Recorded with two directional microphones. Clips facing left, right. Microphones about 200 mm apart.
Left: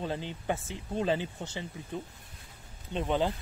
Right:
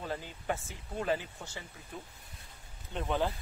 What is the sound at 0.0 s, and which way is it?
Speech, 25° left (ahead or behind).